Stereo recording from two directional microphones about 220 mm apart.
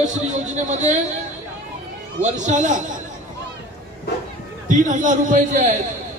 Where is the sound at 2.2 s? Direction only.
35° right (ahead or behind).